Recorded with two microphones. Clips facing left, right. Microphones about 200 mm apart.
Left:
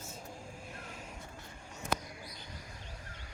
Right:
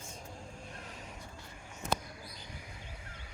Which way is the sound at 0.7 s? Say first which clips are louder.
Left 1 dB; centre (ahead or behind).